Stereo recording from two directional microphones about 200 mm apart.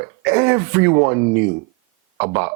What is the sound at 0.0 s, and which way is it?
Speech, 15° right (ahead or behind).